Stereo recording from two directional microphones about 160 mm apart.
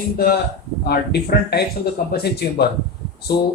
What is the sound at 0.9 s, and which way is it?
A man's voice, 85° left.